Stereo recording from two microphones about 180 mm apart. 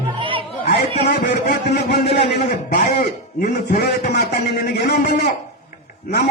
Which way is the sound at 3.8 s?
65° left (ahead or behind).